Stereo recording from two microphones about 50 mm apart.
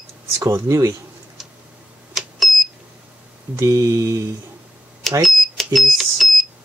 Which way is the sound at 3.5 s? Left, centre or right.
Right.